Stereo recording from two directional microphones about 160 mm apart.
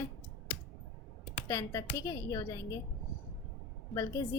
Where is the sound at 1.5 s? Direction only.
20° left (ahead or behind).